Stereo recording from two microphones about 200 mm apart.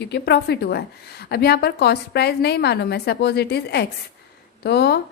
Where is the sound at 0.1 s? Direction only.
55° left (ahead or behind).